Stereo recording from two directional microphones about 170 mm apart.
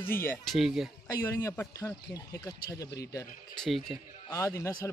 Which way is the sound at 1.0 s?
20° left (ahead or behind).